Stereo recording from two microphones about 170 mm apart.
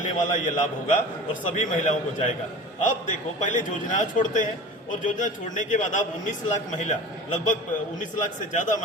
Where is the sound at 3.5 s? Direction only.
45° left (ahead or behind).